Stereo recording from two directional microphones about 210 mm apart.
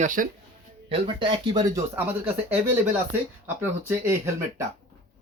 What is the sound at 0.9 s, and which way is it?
Speech, 25° right (ahead or behind).